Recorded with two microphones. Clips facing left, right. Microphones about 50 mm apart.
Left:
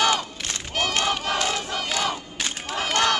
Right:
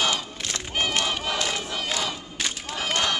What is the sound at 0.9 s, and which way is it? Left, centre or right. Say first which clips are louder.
Crowd: left 2 dB; centre.